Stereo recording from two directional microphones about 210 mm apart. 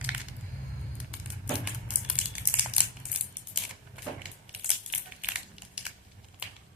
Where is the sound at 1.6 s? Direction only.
5° right (ahead or behind).